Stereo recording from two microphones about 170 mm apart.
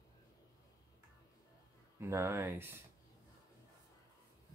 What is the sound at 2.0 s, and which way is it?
Speech, 15° right (ahead or behind).